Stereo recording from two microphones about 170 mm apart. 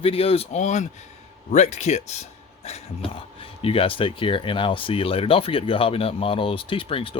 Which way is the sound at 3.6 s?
30° left (ahead or behind).